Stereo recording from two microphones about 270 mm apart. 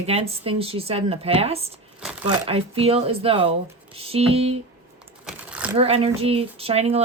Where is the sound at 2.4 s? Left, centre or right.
Right.